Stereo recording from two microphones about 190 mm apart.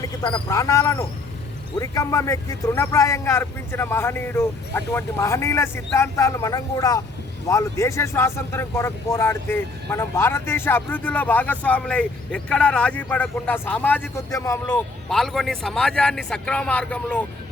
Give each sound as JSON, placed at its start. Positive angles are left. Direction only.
{"t": 0.2, "sound": "speech", "side_deg": 25}
{"t": 15.1, "sound": "speech", "side_deg": 0}